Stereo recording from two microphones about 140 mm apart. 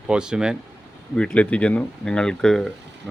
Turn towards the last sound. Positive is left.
turn(degrees=0)  # may be behind; listen again after turning